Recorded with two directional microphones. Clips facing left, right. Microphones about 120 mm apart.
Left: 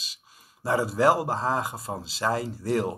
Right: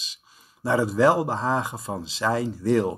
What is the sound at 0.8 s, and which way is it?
Speech, 5° left (ahead or behind).